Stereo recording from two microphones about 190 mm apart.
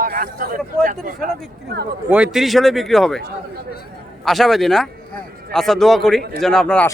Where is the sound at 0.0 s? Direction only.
50° right (ahead or behind).